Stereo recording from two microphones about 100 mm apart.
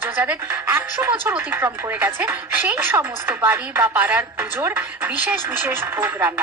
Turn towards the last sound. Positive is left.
turn(degrees=-20)  # may be behind; listen again after turning